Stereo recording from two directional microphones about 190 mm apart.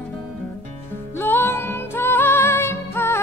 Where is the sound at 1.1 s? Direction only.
10° left (ahead or behind).